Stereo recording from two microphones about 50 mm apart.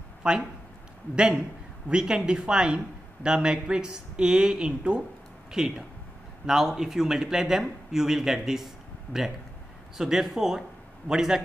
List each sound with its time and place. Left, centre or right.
0.2 s speech: centre